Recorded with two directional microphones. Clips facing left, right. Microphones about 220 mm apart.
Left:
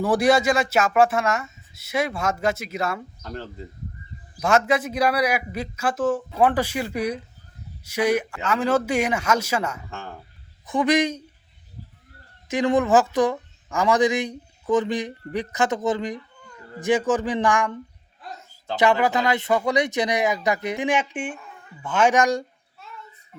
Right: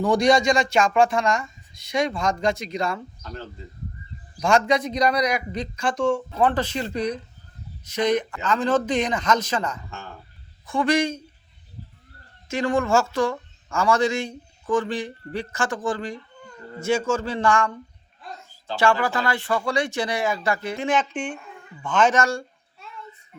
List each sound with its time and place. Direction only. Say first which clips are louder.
0.0 s speech: even; 5° left (ahead or behind)
4.4 s a man's voice: even; 5° left (ahead or behind)
12.5 s a man's voice: left 2 dB; 20° left (ahead or behind)